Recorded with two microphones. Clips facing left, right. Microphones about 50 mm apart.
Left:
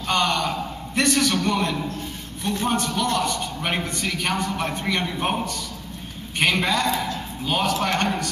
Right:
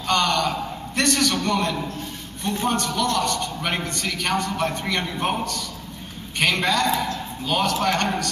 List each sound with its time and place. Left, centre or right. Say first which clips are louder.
0.0 s a man's voice: right 1 dB; centre